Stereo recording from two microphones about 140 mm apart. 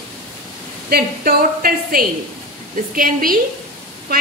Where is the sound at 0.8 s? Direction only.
90° right.